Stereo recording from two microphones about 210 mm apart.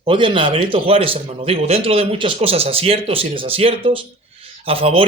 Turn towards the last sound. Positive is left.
turn(degrees=-25)  # may be behind; listen again after turning